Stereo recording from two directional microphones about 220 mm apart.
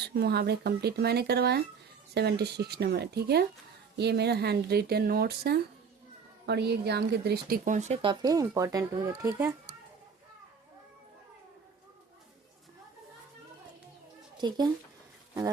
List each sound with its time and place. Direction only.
0.0 s speech: 45° right (ahead or behind); by 9.6 s 15° right (ahead or behind)
14.3 s a child's voice: 20° right (ahead or behind)